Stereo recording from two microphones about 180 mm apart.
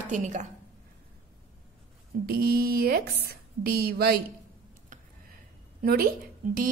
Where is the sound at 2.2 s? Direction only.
55° right (ahead or behind).